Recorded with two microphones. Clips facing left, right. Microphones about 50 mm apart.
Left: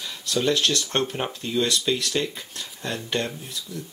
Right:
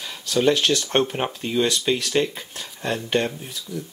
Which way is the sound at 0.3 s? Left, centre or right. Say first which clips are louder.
Right 4 dB; right.